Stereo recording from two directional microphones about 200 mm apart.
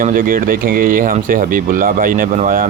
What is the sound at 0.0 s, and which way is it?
Speech, 45° right (ahead or behind).